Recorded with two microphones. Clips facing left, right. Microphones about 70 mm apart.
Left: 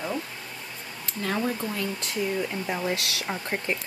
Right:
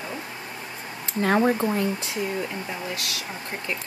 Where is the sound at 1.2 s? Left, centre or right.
Right.